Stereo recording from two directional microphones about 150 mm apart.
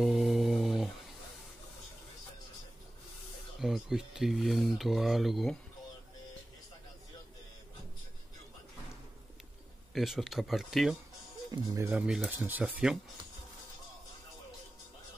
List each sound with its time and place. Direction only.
0.0 s music: centre (ahead or behind)
3.5 s speech: centre (ahead or behind)
9.9 s speech: centre (ahead or behind)
11.5 s speech: 25° right (ahead or behind)
11.9 s speech: 5° right (ahead or behind)